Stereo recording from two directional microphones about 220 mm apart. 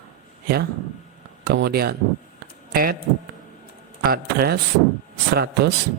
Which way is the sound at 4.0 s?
45° right (ahead or behind).